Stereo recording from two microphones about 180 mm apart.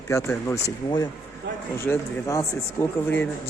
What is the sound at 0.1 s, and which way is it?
Speech, 15° left (ahead or behind).